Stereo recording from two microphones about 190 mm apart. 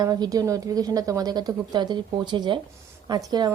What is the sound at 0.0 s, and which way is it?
A woman's voice, 20° right (ahead or behind).